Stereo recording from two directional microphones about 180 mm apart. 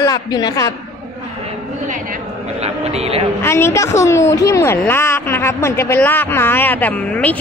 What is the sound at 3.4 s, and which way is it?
Speech, 15° left (ahead or behind).